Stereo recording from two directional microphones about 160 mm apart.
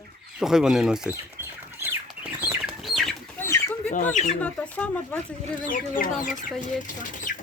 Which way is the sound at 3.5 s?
15° left (ahead or behind).